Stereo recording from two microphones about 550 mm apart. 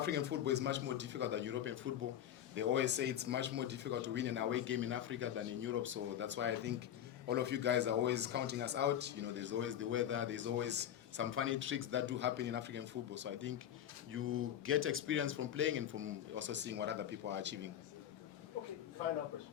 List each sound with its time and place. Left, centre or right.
0.0 s speech: centre